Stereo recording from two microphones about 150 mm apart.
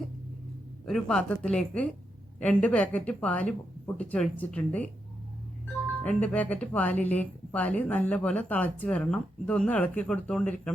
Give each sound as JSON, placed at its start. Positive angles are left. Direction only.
{"t": 0.9, "sound": "a woman's voice", "side_deg": 0}
{"t": 6.0, "sound": "a woman's voice", "side_deg": 10}